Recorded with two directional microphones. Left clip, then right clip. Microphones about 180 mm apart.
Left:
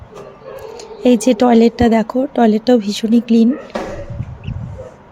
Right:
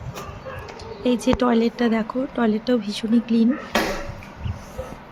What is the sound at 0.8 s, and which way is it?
Speech, 30° left (ahead or behind).